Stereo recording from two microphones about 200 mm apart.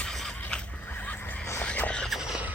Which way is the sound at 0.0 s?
5° left (ahead or behind).